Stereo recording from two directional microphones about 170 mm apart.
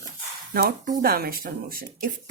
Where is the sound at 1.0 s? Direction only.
60° right (ahead or behind).